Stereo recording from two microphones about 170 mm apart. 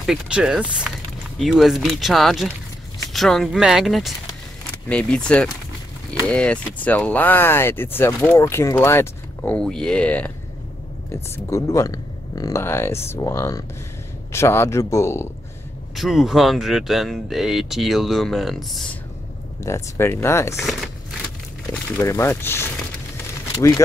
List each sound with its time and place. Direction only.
0.0 s speech: centre (ahead or behind); by 15.2 s 15° left (ahead or behind)
16.0 s speech: centre (ahead or behind)
19.6 s speech: 15° left (ahead or behind)
21.9 s speech: 15° left (ahead or behind)